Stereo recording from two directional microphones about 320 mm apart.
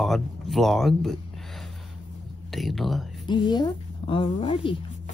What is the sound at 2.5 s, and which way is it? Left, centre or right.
Speech, centre.